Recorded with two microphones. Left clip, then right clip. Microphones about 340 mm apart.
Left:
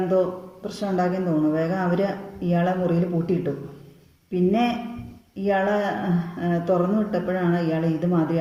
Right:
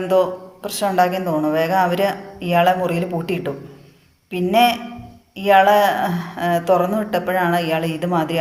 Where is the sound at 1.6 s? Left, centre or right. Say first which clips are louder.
Right 7 dB; right.